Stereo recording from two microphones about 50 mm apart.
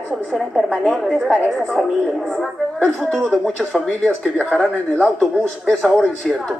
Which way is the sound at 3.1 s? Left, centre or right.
Left.